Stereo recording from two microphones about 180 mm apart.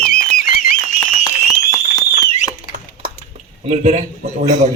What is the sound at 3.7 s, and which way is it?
Speech, 35° right (ahead or behind).